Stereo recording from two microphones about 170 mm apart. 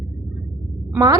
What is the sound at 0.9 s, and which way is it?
Speech, 20° right (ahead or behind).